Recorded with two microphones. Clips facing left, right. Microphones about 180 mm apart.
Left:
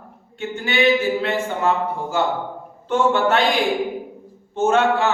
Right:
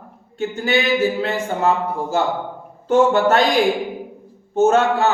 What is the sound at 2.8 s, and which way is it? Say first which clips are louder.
Speech: right 4 dB; 40° right (ahead or behind).